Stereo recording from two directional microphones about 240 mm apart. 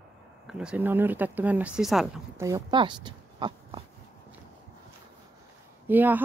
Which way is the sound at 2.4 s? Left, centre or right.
Centre.